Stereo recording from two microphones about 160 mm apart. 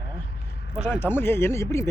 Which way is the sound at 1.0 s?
15° left (ahead or behind).